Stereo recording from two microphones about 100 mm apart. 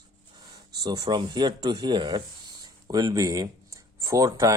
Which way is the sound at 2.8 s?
40° right (ahead or behind).